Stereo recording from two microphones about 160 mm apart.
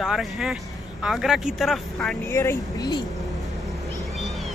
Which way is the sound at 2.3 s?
15° left (ahead or behind).